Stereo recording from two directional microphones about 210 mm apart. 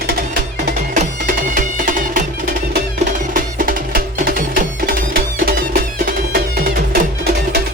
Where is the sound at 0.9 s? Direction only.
40° right (ahead or behind).